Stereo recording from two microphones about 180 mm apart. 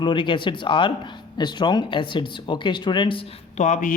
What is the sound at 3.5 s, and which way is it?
Speech, 40° left (ahead or behind).